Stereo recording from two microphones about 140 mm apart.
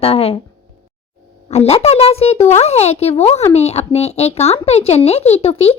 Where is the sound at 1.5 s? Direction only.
50° left (ahead or behind).